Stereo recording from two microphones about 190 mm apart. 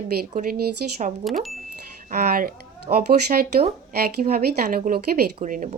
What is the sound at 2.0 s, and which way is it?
Speech, 50° right (ahead or behind).